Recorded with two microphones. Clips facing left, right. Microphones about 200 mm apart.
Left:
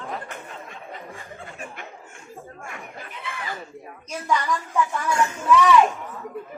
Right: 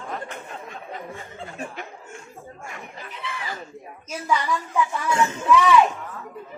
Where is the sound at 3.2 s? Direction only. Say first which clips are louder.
Right 1 dB; 50° left (ahead or behind).